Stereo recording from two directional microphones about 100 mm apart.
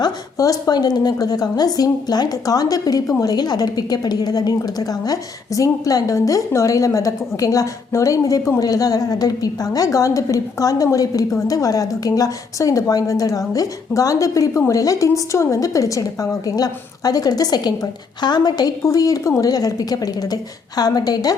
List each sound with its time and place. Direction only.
0.0 s a woman's voice: 35° left (ahead or behind)